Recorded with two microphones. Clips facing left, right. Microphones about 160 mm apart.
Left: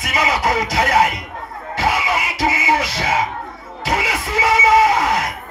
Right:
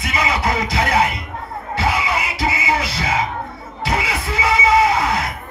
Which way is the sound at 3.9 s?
45° left (ahead or behind).